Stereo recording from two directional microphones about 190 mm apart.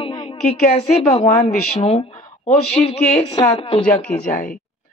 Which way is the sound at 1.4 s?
35° left (ahead or behind).